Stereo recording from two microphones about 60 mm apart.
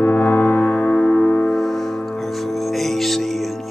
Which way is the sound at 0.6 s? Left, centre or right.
Left.